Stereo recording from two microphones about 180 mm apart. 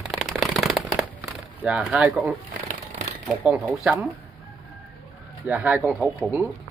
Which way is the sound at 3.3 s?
5° right (ahead or behind).